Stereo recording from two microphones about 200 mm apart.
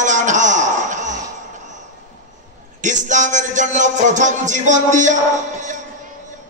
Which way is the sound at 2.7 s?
40° right (ahead or behind).